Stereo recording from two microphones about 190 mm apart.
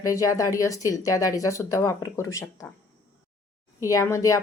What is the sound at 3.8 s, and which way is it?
Speech, 15° left (ahead or behind).